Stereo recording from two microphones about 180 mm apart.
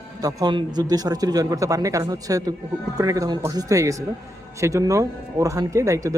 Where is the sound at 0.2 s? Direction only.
20° right (ahead or behind).